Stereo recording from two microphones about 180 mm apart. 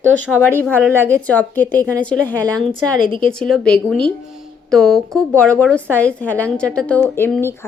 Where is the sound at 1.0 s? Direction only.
15° right (ahead or behind).